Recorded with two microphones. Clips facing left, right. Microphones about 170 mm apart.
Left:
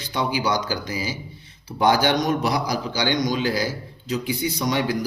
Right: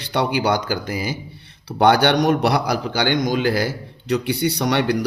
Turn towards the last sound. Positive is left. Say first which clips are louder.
# right 4 dB
turn(degrees=-70)  # may be behind; listen again after turning